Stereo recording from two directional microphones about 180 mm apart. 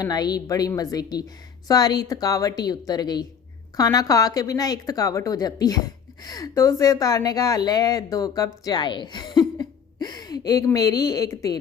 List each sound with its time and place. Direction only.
0.0 s speech: 20° left (ahead or behind)